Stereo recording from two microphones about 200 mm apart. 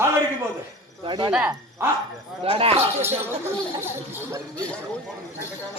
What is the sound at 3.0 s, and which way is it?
Speech, 10° right (ahead or behind).